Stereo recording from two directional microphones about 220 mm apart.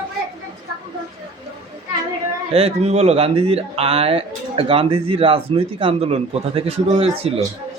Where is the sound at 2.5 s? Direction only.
25° right (ahead or behind).